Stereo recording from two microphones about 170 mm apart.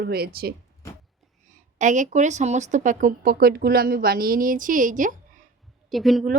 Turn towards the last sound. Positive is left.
turn(degrees=0)  # may be behind; listen again after turning